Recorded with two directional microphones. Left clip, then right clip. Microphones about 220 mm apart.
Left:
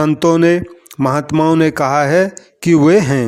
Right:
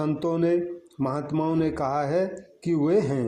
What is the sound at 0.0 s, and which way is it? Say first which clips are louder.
Speech: left 13 dB; 45° left (ahead or behind).